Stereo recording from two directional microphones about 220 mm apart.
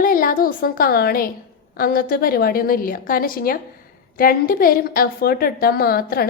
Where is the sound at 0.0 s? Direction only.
40° left (ahead or behind).